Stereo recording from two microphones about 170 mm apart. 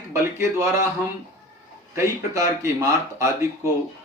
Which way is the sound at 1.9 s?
15° right (ahead or behind).